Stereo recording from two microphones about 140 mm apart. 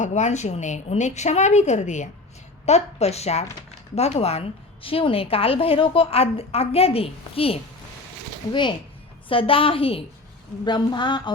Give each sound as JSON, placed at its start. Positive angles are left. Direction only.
{"t": 0.0, "sound": "a woman's voice", "side_deg": 55}
{"t": 9.3, "sound": "a woman's voice", "side_deg": 40}